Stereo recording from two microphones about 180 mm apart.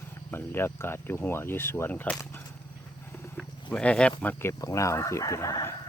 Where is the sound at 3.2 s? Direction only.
5° left (ahead or behind).